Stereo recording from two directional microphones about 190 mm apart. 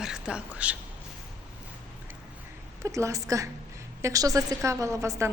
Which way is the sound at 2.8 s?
15° right (ahead or behind).